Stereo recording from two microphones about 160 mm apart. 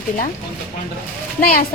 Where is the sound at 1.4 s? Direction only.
60° left (ahead or behind).